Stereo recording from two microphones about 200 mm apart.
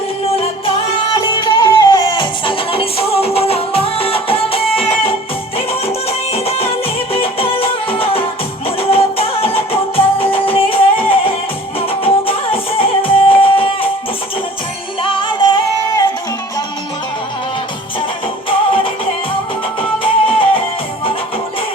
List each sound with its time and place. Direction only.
1.1 s music: 20° left (ahead or behind)
15.0 s music: 25° left (ahead or behind)
18.4 s music: 25° left (ahead or behind)
20.0 s music: 25° left (ahead or behind)